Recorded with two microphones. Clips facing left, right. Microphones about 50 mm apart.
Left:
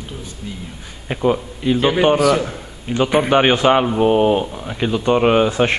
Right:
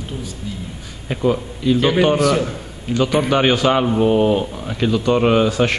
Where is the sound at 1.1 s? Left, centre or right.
Centre.